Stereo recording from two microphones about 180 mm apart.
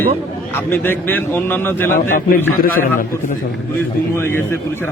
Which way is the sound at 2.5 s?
50° left (ahead or behind).